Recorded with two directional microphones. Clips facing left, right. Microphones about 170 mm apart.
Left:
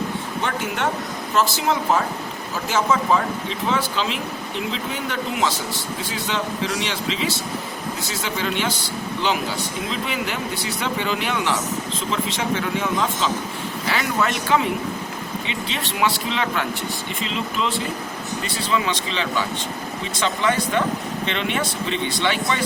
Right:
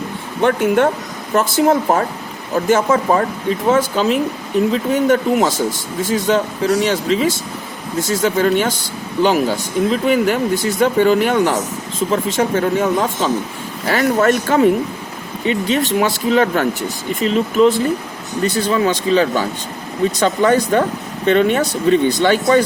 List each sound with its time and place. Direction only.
0.4 s speech: 55° right (ahead or behind)